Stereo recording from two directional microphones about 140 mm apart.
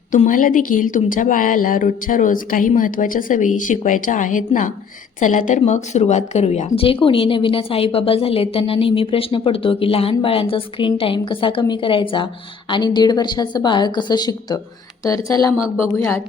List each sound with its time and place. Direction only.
0.1 s a woman's voice: 70° left (ahead or behind); by 15.5 s 25° left (ahead or behind)